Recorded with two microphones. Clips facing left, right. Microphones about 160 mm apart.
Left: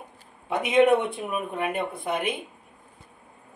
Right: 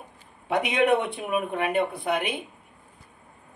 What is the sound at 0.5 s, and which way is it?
Speech, 70° right (ahead or behind).